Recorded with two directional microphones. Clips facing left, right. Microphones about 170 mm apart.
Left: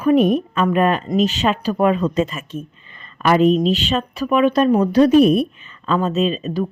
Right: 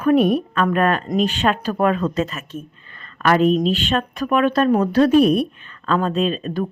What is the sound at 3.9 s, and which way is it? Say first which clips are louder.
Speech: left 1 dB; centre (ahead or behind).